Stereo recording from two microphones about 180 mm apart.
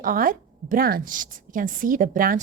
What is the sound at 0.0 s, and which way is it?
A woman's voice, 50° right (ahead or behind).